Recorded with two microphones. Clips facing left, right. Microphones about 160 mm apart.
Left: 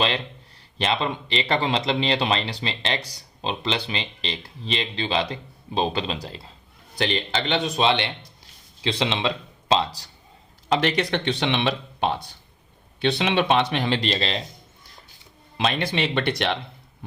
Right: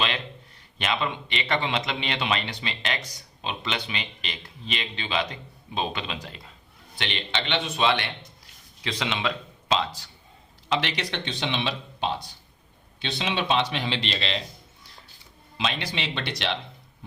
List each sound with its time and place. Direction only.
0.8 s speech: 35° left (ahead or behind)
10.7 s speech: 45° left (ahead or behind)
15.5 s speech: 50° left (ahead or behind)